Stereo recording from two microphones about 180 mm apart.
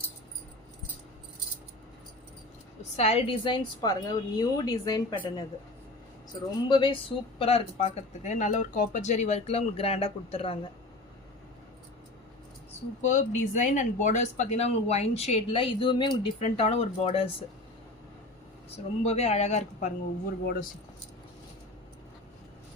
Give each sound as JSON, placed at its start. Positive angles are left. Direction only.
{"t": 2.9, "sound": "a woman's voice", "side_deg": 35}
{"t": 6.7, "sound": "speech", "side_deg": 25}
{"t": 13.0, "sound": "speech", "side_deg": 45}
{"t": 19.0, "sound": "speech", "side_deg": 35}
{"t": 20.4, "sound": "speech", "side_deg": 60}